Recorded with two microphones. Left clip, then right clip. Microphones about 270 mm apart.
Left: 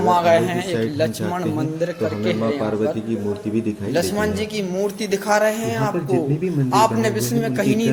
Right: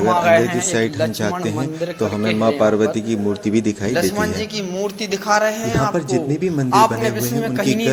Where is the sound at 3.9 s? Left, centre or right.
Centre.